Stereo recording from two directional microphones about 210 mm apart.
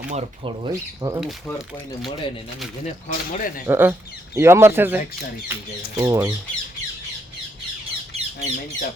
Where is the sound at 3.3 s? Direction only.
40° left (ahead or behind).